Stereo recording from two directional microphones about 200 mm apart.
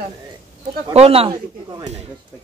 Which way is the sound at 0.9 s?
30° right (ahead or behind).